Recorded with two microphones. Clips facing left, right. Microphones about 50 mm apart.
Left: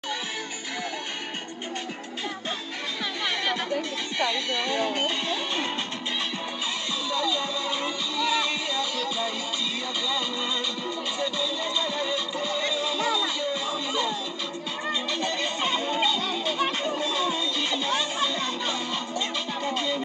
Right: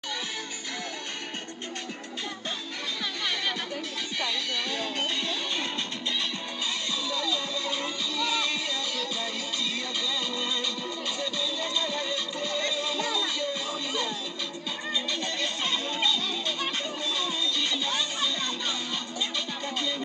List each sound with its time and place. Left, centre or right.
3.4 s music: centre
7.1 s music: left
11.1 s music: centre